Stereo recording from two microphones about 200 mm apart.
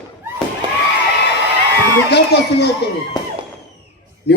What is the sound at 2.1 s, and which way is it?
Speech, 55° left (ahead or behind).